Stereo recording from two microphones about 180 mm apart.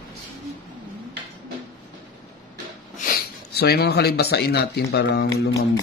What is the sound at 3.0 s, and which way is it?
Speech, 55° left (ahead or behind).